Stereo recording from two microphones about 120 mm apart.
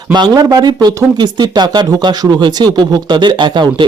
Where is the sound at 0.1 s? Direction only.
35° right (ahead or behind).